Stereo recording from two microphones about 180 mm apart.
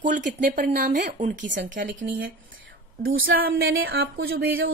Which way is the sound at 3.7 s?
80° right.